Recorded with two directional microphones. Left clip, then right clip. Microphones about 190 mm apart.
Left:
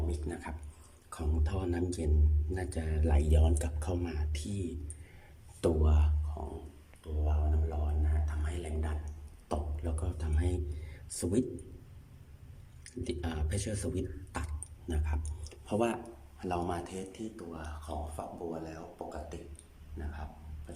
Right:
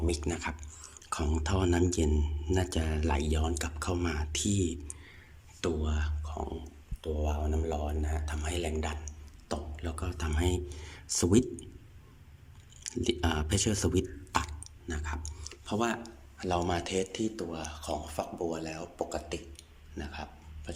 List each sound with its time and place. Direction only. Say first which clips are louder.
0.3 s speech: right 6 dB; 10° right (ahead or behind)
3.1 s speech: even; 5° left (ahead or behind)
4.0 s speech: right 8 dB; 15° right (ahead or behind)
5.5 s speech: left 2 dB; 20° left (ahead or behind)
7.0 s speech: right 7 dB; 20° right (ahead or behind)
9.5 s speech: even; 5° left (ahead or behind)
12.8 s speech: right 8 dB; 10° right (ahead or behind)
14.3 s tick-tock: right 13 dB; 5° left (ahead or behind)
16.4 s speech: right 4 dB; 5° left (ahead or behind)
16.6 s speech: right 7 dB; 5° right (ahead or behind)